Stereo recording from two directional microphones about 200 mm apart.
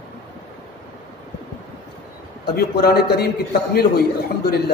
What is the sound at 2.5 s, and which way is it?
A man's voice, 50° left (ahead or behind).